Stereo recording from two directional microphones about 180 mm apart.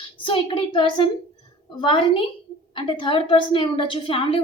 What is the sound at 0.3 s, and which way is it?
A woman's voice, 25° left (ahead or behind).